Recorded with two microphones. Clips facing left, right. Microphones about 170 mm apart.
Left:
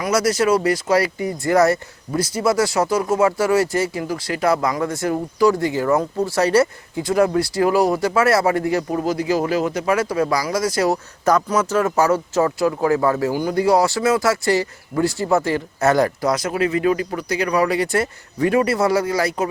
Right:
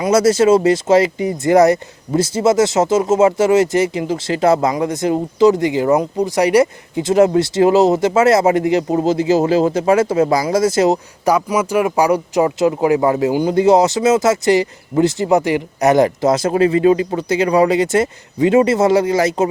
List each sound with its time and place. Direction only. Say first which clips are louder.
0.0 s speech: right 6 dB; 25° right (ahead or behind)
11.3 s speech: right 2 dB; 10° right (ahead or behind)